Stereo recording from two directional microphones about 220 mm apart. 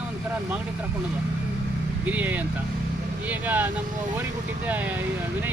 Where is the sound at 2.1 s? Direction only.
5° right (ahead or behind).